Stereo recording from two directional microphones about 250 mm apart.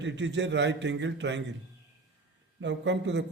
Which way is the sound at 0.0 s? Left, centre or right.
Right.